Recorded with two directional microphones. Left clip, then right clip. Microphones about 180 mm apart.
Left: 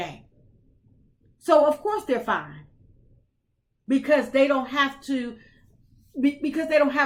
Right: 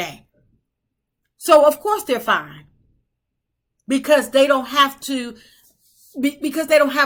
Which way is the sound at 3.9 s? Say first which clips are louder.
Right 5 dB; 20° right (ahead or behind).